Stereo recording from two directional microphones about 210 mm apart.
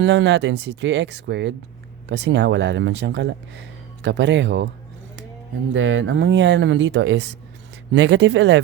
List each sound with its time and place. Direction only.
0.0 s speech: 60° right (ahead or behind)
5.7 s speech: 60° right (ahead or behind)